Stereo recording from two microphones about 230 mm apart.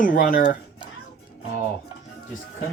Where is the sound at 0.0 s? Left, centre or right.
Left.